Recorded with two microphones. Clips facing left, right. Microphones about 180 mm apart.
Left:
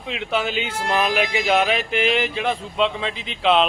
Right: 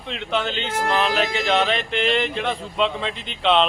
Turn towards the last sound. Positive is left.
turn(degrees=0)  # may be behind; listen again after turning